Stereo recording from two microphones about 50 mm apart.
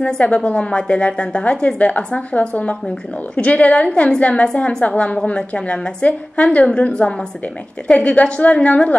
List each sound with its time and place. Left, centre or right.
0.0 s a woman's voice: left